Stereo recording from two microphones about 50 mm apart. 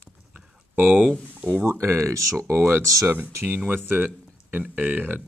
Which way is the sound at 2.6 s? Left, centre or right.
Right.